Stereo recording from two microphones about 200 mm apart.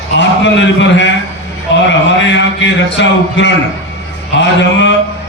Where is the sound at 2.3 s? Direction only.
65° left (ahead or behind).